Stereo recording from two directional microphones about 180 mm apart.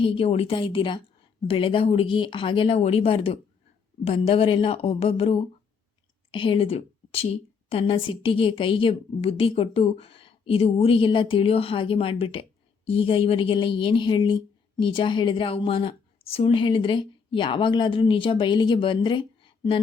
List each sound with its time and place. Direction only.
0.0 s a woman's voice: 30° left (ahead or behind)